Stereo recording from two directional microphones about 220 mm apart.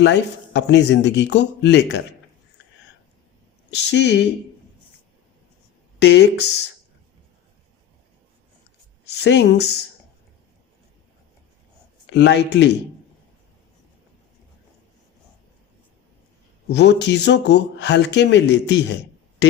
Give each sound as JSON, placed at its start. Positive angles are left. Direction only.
{"t": 0.0, "sound": "speech", "side_deg": 50}
{"t": 3.7, "sound": "speech", "side_deg": 50}
{"t": 6.0, "sound": "speech", "side_deg": 50}
{"t": 9.0, "sound": "speech", "side_deg": 50}
{"t": 12.0, "sound": "speech", "side_deg": 50}
{"t": 16.7, "sound": "speech", "side_deg": 50}